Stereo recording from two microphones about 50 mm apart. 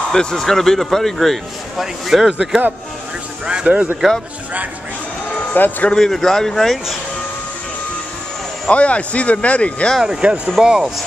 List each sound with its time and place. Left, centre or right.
0.1 s a man's voice: centre
2.0 s speech: centre
3.4 s speech: centre
5.3 s a sound: left
5.9 s a man's voice: centre
8.6 s speech: left
10.0 s speech: right